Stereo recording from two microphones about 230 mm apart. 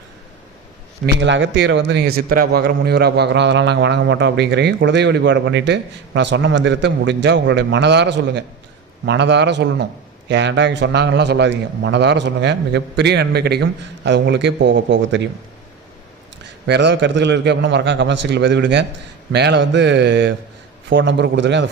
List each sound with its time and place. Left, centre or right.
1.0 s a man's voice: right
16.6 s a man's voice: right